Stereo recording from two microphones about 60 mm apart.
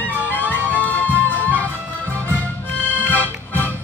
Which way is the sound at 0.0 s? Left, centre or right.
Left.